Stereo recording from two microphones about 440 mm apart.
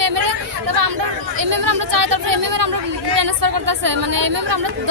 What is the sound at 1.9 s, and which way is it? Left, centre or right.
Speech, right.